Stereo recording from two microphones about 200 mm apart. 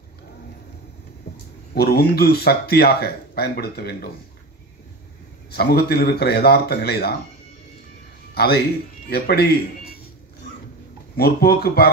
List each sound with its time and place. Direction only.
1.3 s a sound: 50° left (ahead or behind)
1.7 s speech: 50° left (ahead or behind)
5.5 s speech: 50° left (ahead or behind)
9.1 s speech: 50° left (ahead or behind)
11.1 s speech: 50° left (ahead or behind)